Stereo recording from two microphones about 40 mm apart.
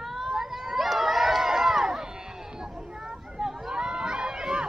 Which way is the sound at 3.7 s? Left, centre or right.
Centre.